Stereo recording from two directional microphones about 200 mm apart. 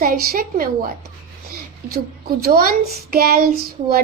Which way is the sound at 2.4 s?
50° right (ahead or behind).